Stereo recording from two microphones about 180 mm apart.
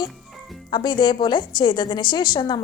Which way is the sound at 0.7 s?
25° left (ahead or behind).